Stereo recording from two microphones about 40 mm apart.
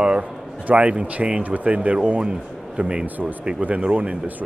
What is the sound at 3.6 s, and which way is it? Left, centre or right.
Speech, right.